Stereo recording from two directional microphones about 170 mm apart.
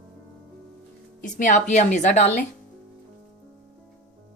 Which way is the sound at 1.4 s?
45° left (ahead or behind).